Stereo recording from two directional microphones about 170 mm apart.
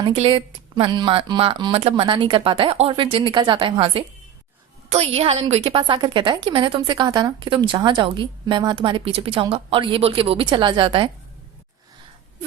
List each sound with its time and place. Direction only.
0.0 s a woman's voice: 30° right (ahead or behind)